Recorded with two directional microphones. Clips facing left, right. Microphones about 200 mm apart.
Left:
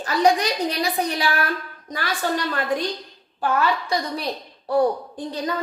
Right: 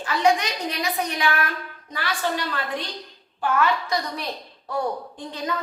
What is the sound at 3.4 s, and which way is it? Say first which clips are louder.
A woman's voice: left 1 dB; 35° left (ahead or behind).